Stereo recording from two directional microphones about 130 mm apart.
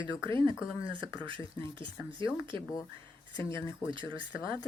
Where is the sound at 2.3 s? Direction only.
10° right (ahead or behind).